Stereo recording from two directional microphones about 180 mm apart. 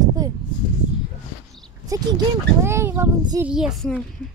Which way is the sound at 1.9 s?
20° right (ahead or behind).